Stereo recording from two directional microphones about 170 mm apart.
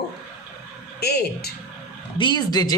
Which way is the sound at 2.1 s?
25° left (ahead or behind).